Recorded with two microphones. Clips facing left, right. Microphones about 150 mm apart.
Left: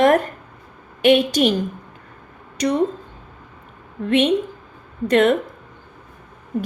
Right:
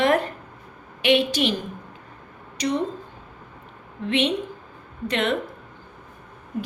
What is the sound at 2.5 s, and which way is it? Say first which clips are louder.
Speech: left 4 dB; 50° left (ahead or behind).